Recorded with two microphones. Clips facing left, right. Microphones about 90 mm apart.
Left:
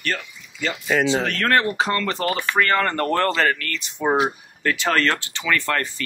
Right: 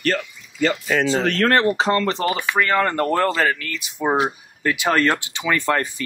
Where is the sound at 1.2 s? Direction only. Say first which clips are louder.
Right 3 dB; 30° right (ahead or behind).